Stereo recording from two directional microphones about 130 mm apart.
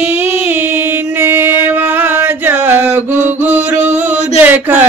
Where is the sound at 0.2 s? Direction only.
15° right (ahead or behind).